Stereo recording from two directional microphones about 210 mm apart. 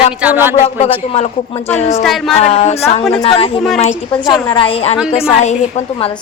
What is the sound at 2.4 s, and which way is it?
A woman's voice, 30° left (ahead or behind).